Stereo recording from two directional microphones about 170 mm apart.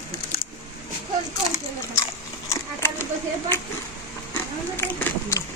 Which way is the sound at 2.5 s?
15° left (ahead or behind).